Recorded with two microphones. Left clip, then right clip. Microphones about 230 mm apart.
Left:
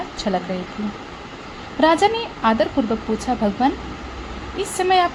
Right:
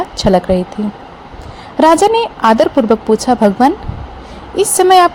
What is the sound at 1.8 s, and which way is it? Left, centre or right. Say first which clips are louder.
A woman's voice: right 8 dB; right.